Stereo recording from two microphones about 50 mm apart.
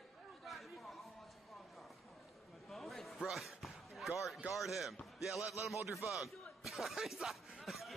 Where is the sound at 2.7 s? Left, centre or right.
Centre.